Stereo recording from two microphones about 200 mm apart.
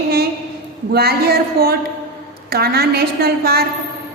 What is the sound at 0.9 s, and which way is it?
A woman's voice, 50° right (ahead or behind).